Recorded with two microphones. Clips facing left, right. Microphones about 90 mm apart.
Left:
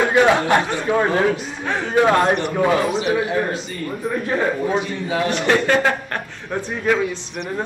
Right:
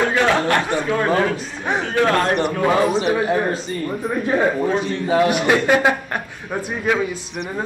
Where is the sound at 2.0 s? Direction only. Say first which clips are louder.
Left 3 dB; 15° left (ahead or behind).